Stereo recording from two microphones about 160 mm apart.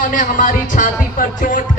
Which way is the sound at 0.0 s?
55° left (ahead or behind).